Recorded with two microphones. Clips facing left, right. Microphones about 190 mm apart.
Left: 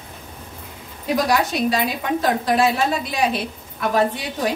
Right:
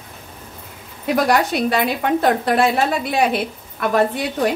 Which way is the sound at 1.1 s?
60° right (ahead or behind).